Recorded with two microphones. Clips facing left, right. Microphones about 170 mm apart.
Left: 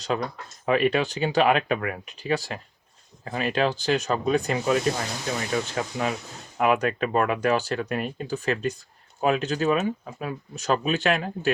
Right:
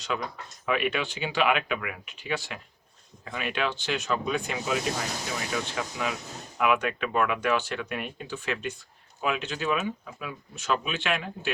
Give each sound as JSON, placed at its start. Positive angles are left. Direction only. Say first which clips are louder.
{"t": 0.0, "sound": "speech", "louder": "left 5 dB", "side_deg": 40}